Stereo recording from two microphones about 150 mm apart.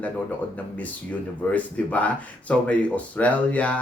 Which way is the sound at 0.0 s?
10° left (ahead or behind).